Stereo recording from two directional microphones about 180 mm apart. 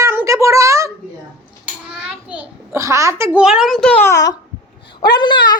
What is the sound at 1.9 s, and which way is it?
A child's voice, 5° right (ahead or behind).